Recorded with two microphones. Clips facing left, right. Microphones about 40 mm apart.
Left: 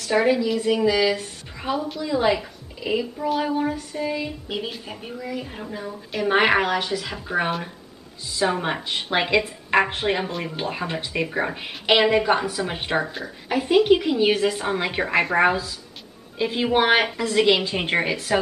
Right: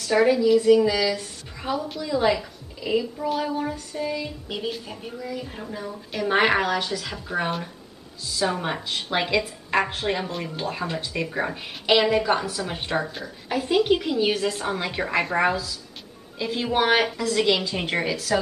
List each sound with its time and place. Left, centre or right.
0.1 s a woman's voice: centre; by 18.4 s left